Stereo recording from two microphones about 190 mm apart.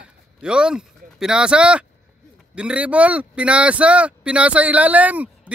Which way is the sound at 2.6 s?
5° right (ahead or behind).